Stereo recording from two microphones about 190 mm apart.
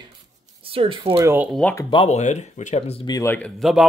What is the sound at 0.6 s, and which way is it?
Speech, 30° right (ahead or behind).